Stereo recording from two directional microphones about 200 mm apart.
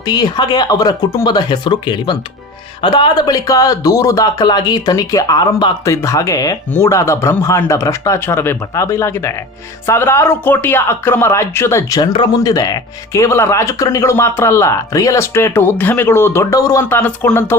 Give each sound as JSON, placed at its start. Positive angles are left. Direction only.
{"t": 0.0, "sound": "speech", "side_deg": 20}